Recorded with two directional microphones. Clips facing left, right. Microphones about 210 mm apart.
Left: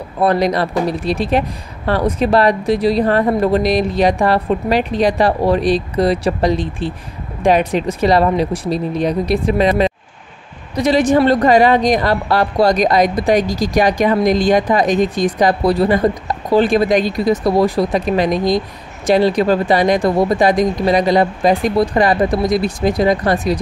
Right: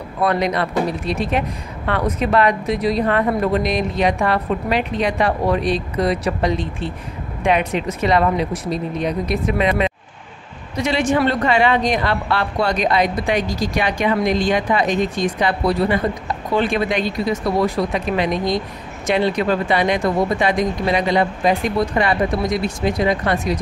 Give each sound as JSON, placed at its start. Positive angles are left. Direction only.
{"t": 0.2, "sound": "a woman's voice", "side_deg": 35}